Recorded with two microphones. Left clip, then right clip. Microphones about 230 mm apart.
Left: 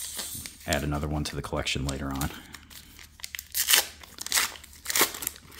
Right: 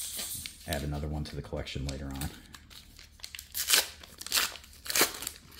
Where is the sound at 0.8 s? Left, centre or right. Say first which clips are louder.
Left 7 dB; left.